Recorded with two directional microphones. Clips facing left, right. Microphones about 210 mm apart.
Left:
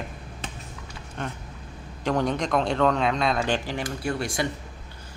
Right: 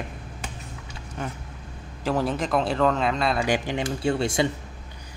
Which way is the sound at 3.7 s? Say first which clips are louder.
Right 4 dB; 25° right (ahead or behind).